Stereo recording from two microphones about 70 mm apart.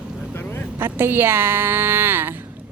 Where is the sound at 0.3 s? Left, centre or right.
Left.